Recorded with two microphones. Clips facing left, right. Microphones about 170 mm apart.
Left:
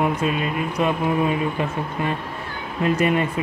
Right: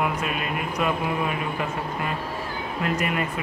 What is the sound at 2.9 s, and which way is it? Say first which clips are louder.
Speech: left 7 dB; 25° left (ahead or behind).